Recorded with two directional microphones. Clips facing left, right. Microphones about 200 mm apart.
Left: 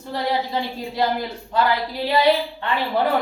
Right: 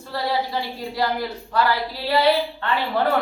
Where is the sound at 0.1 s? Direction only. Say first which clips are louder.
Left 1 dB; 20° left (ahead or behind).